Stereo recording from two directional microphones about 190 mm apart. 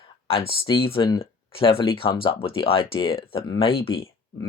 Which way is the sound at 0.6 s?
30° left (ahead or behind).